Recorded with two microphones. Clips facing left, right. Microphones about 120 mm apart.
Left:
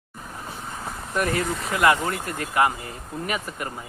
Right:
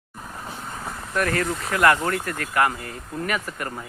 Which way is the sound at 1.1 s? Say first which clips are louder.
Right 1 dB; 15° left (ahead or behind).